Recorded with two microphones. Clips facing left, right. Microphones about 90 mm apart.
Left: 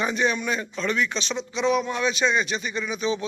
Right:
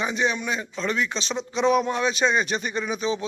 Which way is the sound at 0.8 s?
30° right (ahead or behind).